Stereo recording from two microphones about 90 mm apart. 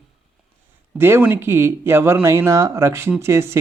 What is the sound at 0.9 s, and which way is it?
Speech, 25° right (ahead or behind).